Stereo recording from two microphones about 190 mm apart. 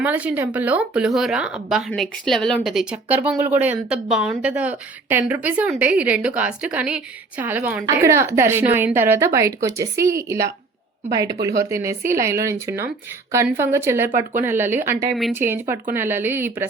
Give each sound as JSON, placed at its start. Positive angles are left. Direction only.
{"t": 0.0, "sound": "a woman's voice", "side_deg": -10}